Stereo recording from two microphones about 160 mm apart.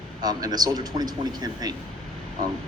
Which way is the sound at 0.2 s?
25° right (ahead or behind).